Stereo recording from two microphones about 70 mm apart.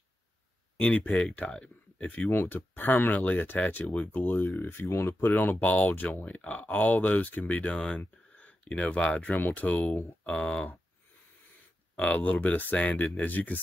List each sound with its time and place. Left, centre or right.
0.7 s speech: centre
2.3 s speech: left
12.0 s speech: centre